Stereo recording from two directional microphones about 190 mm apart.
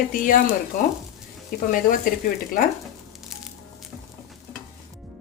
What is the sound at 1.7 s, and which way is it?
Speech, 45° left (ahead or behind).